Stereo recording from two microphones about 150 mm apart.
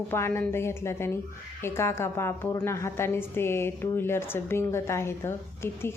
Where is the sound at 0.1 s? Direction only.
15° left (ahead or behind).